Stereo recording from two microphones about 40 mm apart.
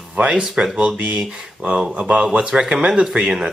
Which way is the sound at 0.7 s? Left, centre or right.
Right.